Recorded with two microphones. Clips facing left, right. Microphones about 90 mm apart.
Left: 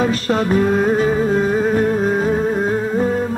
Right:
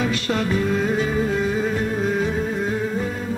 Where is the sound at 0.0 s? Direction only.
40° left (ahead or behind).